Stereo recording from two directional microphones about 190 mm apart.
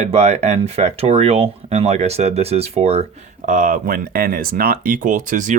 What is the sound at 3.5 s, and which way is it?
Speech, 45° right (ahead or behind).